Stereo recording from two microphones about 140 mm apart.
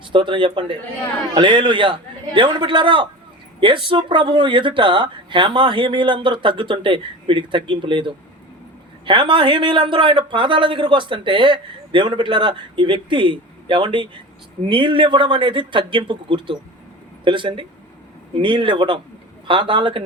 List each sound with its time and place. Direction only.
0.0 s speech: 35° right (ahead or behind)